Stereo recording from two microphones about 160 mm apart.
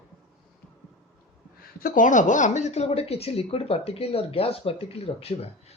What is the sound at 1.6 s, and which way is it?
A woman's voice, 60° left (ahead or behind).